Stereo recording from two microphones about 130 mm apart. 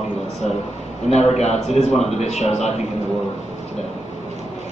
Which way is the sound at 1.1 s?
55° left (ahead or behind).